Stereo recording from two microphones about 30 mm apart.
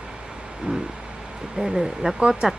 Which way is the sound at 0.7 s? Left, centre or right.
Right.